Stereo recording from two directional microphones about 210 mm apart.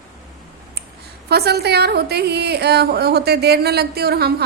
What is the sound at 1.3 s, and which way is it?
A woman's voice, 50° right (ahead or behind).